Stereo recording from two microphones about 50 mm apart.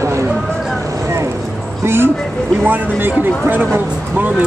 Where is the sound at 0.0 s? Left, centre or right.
Right.